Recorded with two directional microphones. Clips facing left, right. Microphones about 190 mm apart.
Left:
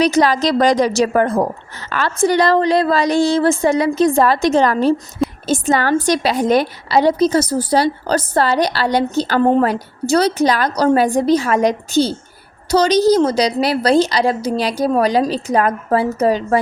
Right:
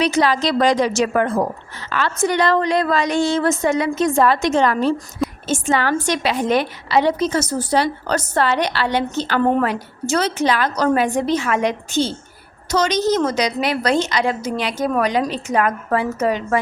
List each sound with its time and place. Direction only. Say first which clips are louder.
0.0 s a woman's voice: left 3 dB; 40° left (ahead or behind)